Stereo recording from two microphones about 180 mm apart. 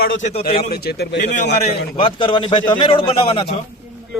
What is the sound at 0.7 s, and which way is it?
Speech, 65° left (ahead or behind).